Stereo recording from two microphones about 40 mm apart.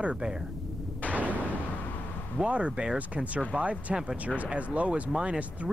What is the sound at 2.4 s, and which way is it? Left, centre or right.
Speech, right.